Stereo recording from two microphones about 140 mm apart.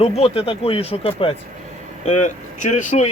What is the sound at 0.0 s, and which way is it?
Speech, 45° left (ahead or behind).